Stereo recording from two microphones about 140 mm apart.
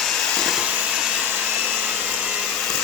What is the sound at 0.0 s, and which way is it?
Vacuum cleaner, 5° left (ahead or behind).